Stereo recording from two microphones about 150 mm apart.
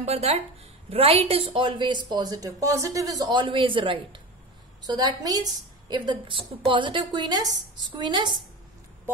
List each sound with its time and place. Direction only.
0.0 s a woman's voice: 45° right (ahead or behind)